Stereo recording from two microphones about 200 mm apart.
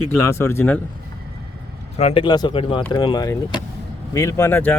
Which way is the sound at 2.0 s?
30° left (ahead or behind).